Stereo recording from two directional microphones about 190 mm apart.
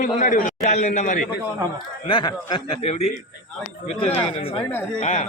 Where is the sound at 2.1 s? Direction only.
25° left (ahead or behind); by 5.2 s 40° left (ahead or behind).